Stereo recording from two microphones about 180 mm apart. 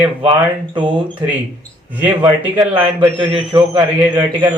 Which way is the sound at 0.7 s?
25° right (ahead or behind).